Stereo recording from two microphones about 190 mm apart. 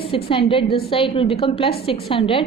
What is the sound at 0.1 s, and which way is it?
A woman's voice, 30° left (ahead or behind).